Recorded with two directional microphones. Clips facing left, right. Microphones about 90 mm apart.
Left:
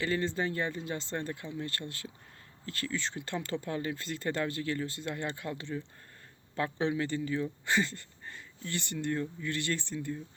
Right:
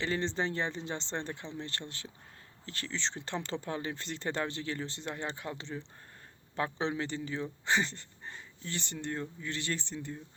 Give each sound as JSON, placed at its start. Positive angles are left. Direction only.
{"t": 0.0, "sound": "speech", "side_deg": -25}